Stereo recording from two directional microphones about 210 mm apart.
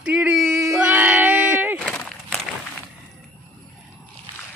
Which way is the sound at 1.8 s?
5° left (ahead or behind).